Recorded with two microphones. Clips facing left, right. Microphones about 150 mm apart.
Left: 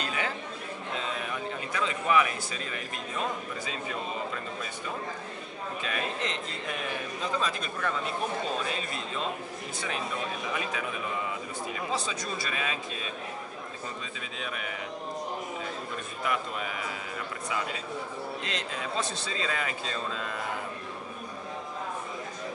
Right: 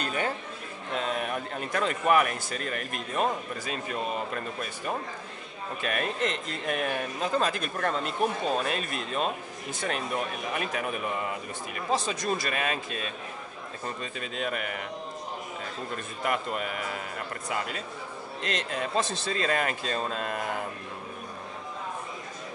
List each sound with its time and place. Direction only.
0.0 s chatter: 45° right (ahead or behind)
0.9 s a man's voice: 55° right (ahead or behind)
4.3 s a man's voice: 55° right (ahead or behind)
14.3 s a man's voice: 55° right (ahead or behind)
16.3 s a man's voice: 55° right (ahead or behind)